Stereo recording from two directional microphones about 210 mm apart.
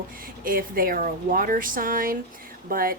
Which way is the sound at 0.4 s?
45° right (ahead or behind).